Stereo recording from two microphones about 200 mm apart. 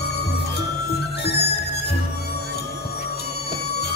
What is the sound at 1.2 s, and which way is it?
Music, 55° left (ahead or behind).